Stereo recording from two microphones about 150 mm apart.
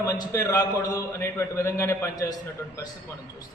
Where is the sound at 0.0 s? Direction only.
25° left (ahead or behind).